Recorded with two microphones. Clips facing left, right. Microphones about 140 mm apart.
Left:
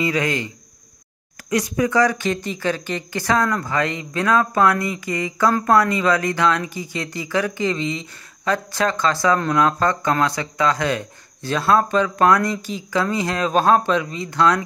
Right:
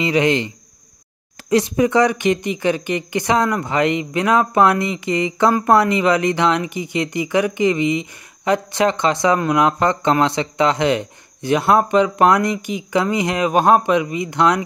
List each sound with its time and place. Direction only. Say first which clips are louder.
0.0 s speech: right 5 dB; 25° right (ahead or behind)
1.5 s speech: right 4 dB; 25° right (ahead or behind)